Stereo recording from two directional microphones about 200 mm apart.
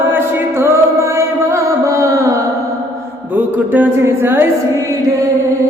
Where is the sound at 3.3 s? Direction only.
10° right (ahead or behind).